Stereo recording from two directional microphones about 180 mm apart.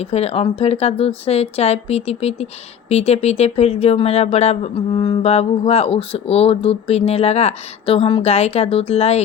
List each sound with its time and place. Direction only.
0.0 s speech: 35° left (ahead or behind)